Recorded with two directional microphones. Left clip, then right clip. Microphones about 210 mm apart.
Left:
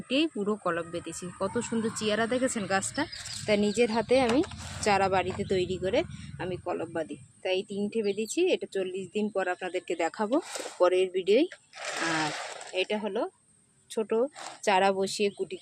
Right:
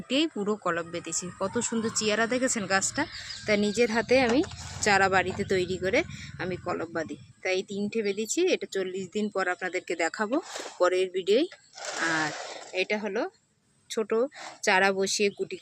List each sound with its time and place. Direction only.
0.1 s speech: centre (ahead or behind)